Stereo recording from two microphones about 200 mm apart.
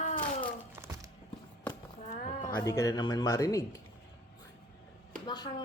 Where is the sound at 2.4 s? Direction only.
15° left (ahead or behind).